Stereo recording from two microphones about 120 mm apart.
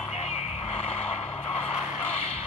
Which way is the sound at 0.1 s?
55° left (ahead or behind).